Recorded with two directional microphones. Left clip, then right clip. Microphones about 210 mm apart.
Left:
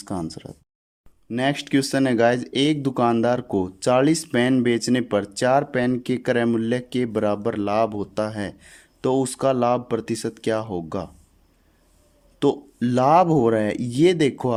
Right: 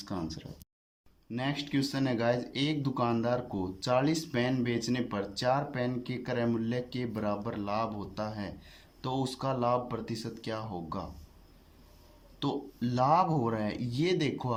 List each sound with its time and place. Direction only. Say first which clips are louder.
0.0 s speech: left 8 dB; 40° left (ahead or behind)
12.4 s speech: left 13 dB; 45° left (ahead or behind)